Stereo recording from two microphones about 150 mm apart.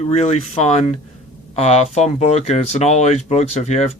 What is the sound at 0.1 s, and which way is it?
Speech, 45° left (ahead or behind).